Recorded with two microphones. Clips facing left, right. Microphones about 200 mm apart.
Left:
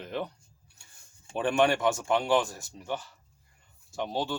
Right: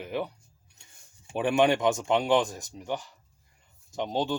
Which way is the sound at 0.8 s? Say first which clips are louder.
Right 3 dB; 20° right (ahead or behind).